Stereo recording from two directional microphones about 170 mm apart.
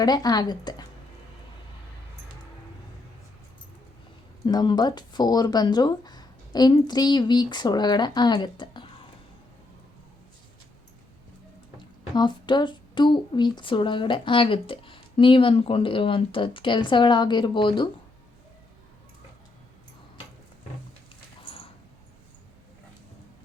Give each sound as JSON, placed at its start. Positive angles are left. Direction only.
{"t": 0.0, "sound": "speech", "side_deg": 25}
{"t": 4.4, "sound": "speech", "side_deg": 25}
{"t": 12.1, "sound": "speech", "side_deg": 25}
{"t": 21.4, "sound": "a sound", "side_deg": 30}